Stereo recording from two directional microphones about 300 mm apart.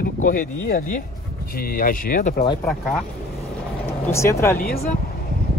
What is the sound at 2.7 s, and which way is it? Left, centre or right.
Speech, centre.